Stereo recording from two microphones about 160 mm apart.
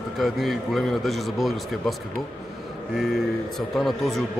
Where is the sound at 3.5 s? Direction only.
Centre (ahead or behind).